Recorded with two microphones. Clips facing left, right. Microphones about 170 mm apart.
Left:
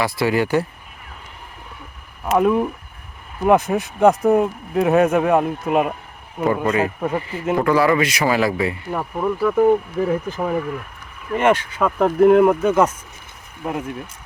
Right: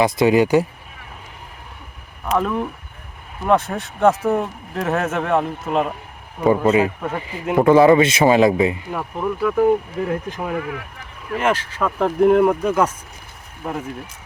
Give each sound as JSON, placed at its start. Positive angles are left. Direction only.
{"t": 0.0, "sound": "speech", "side_deg": -20}
{"t": 2.3, "sound": "a man's voice", "side_deg": 15}
{"t": 3.8, "sound": "a man's voice", "side_deg": 0}
{"t": 6.4, "sound": "speech", "side_deg": -15}
{"t": 8.9, "sound": "speech", "side_deg": 5}